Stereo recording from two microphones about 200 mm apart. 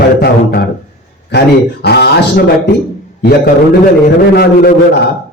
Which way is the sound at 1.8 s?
55° left (ahead or behind).